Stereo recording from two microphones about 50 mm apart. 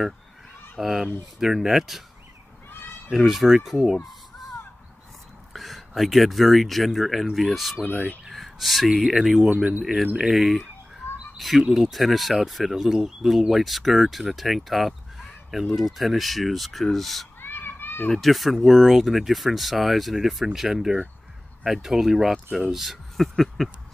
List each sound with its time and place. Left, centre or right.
0.7 s speech: centre
3.1 s speech: centre
5.5 s speech: centre
9.7 s speech: right
10.1 s speech: centre
17.4 s children playing: left
18.1 s speech: centre